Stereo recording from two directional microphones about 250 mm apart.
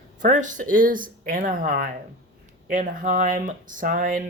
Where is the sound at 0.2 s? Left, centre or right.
Right.